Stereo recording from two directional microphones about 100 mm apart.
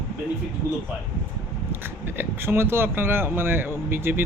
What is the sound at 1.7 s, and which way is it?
Speech, 20° right (ahead or behind).